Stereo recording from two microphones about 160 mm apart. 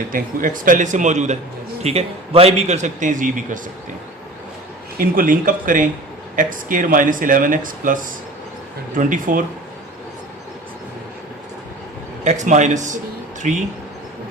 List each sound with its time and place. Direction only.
0.1 s a man's voice: 55° right (ahead or behind)
4.9 s speech: 60° right (ahead or behind)
12.2 s a man's voice: 45° right (ahead or behind)